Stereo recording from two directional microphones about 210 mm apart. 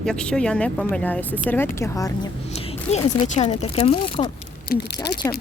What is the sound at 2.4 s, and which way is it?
Speech, 30° left (ahead or behind).